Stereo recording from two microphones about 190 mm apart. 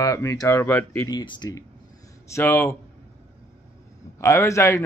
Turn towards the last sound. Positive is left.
turn(degrees=15)  # may be behind; listen again after turning